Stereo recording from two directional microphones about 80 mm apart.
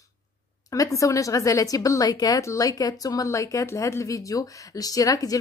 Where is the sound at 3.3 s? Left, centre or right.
Left.